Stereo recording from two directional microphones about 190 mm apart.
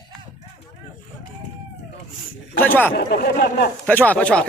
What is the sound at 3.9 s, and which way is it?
Speech, 10° left (ahead or behind).